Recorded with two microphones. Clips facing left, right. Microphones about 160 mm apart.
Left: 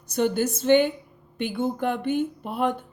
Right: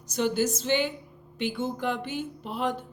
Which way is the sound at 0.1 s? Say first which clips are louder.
Left 3 dB; 55° left (ahead or behind).